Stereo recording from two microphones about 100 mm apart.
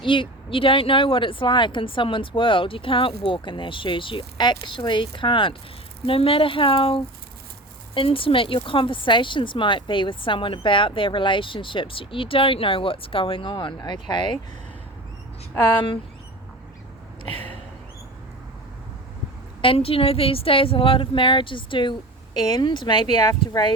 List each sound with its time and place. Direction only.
0.0 s speech: 60° left (ahead or behind)
19.6 s speech: 70° left (ahead or behind); by 23.7 s 50° left (ahead or behind)